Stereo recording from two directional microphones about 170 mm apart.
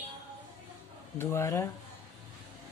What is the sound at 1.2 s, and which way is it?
Speech, 15° left (ahead or behind).